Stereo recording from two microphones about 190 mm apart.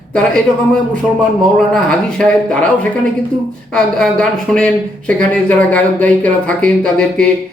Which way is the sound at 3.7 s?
Centre (ahead or behind).